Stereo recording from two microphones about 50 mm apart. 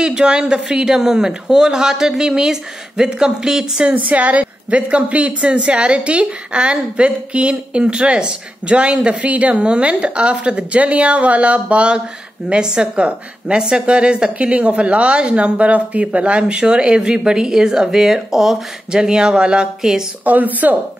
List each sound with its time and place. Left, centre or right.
0.0 s speech: centre
3.9 s a woman's voice: right; by 20.1 s centre
20.2 s a woman's voice: right